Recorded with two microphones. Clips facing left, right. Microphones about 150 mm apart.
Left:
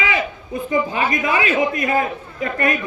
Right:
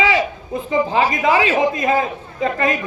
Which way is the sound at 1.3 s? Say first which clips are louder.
Right 2 dB; 25° right (ahead or behind).